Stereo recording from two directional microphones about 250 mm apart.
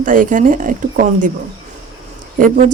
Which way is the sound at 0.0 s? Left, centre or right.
Right.